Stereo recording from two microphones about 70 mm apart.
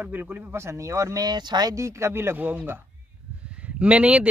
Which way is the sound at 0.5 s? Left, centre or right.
Right.